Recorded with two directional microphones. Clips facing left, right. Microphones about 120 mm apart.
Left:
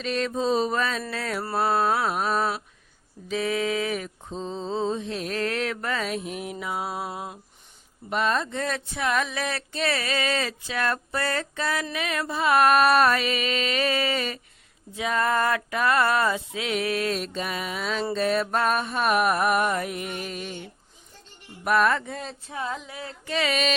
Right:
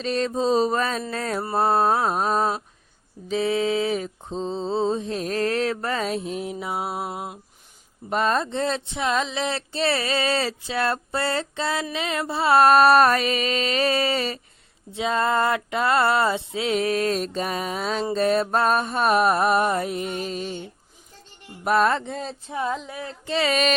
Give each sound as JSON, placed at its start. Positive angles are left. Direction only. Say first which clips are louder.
{"t": 0.0, "sound": "mantra", "louder": "right 3 dB", "side_deg": -35}
{"t": 8.1, "sound": "speech", "louder": "right 3 dB", "side_deg": -40}
{"t": 12.3, "sound": "mantra", "louder": "right 3 dB", "side_deg": -30}
{"t": 18.1, "sound": "speech", "louder": "right 4 dB", "side_deg": -35}
{"t": 23.2, "sound": "mantra", "louder": "right 3 dB", "side_deg": -30}